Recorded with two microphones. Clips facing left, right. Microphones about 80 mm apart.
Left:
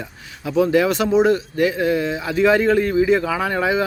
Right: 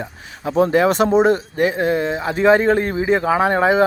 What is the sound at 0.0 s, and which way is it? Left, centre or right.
Speech, right.